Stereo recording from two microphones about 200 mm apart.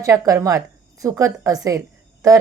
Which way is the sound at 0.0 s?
15° right (ahead or behind).